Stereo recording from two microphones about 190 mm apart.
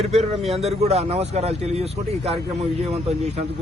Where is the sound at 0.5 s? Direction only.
35° right (ahead or behind).